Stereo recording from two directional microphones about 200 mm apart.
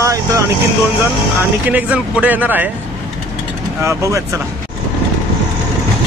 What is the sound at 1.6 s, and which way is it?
Speech, 5° right (ahead or behind).